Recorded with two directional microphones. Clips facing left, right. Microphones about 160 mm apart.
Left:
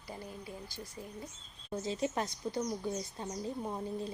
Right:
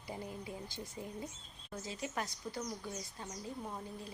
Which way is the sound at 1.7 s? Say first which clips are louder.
Left 7 dB; 25° left (ahead or behind).